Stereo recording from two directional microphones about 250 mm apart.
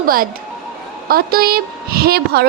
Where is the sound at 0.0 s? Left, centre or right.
Right.